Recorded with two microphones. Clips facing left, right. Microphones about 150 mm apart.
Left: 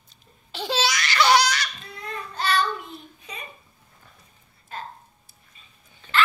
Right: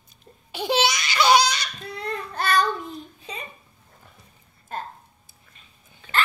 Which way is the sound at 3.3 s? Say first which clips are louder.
Right 3 dB; 30° right (ahead or behind).